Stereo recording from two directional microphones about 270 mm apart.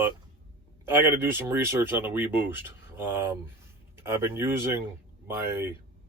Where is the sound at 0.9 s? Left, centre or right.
Centre.